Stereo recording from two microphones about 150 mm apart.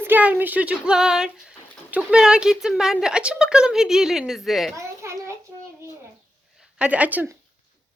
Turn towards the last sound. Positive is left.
turn(degrees=-10)  # may be behind; listen again after turning